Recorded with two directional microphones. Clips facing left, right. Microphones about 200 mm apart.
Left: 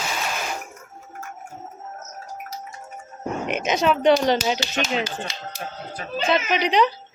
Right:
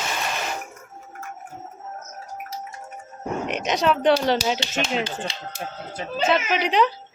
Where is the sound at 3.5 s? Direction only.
Centre (ahead or behind).